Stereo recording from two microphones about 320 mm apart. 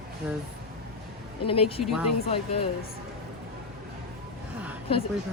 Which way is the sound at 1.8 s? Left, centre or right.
Centre.